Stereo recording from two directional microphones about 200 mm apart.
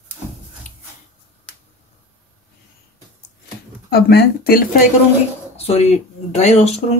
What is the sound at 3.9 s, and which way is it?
Speech, 55° left (ahead or behind).